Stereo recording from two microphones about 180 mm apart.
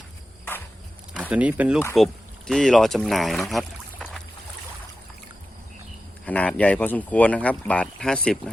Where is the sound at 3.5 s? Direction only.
Centre (ahead or behind).